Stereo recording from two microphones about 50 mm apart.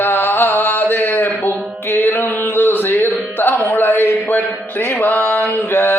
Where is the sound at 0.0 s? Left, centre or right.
Left.